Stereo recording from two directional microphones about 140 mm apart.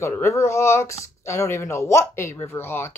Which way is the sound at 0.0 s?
20° left (ahead or behind).